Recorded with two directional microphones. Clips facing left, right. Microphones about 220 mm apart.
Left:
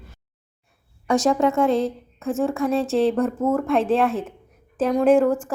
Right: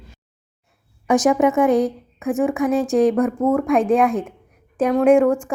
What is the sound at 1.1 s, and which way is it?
A woman's voice, 15° right (ahead or behind).